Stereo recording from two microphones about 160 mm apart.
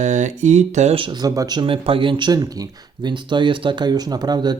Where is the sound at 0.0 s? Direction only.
50° right (ahead or behind).